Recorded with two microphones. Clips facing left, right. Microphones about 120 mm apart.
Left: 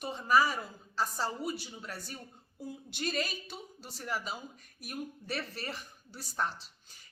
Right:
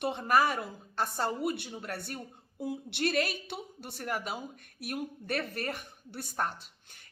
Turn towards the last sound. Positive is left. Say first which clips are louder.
# right 1 dB
turn(degrees=-50)  # may be behind; listen again after turning